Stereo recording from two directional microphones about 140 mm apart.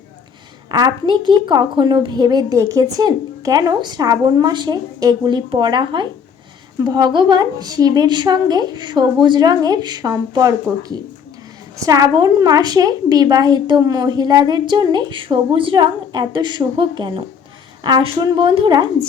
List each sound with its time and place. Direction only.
0.7 s a woman's voice: 30° right (ahead or behind)